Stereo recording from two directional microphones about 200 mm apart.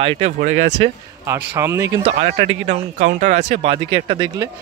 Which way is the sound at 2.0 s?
30° right (ahead or behind).